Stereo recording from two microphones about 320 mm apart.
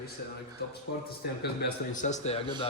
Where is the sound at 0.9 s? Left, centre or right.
Left.